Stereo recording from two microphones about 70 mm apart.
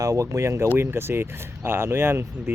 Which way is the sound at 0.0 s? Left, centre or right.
Right.